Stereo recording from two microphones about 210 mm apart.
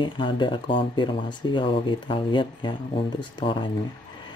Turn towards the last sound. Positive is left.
turn(degrees=25)  # may be behind; listen again after turning